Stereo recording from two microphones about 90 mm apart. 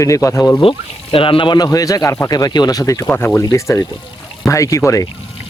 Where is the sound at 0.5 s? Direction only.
80° left.